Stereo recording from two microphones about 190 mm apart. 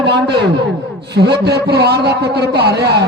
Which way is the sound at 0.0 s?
60° right (ahead or behind).